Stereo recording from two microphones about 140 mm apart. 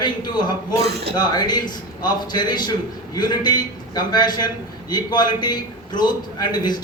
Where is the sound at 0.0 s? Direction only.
30° left (ahead or behind).